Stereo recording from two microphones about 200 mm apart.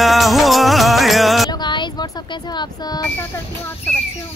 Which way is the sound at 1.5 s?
20° left (ahead or behind).